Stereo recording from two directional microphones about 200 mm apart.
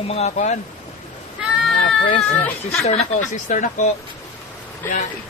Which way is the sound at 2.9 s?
35° left (ahead or behind).